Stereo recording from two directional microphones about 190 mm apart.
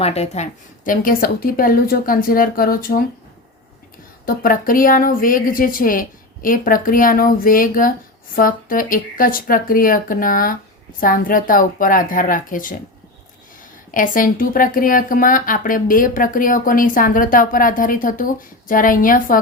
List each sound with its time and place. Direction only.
0.0 s a woman's voice: 35° left (ahead or behind)
0.9 s speech: 50° left (ahead or behind)
4.3 s speech: 50° left (ahead or behind)
13.9 s speech: 45° left (ahead or behind)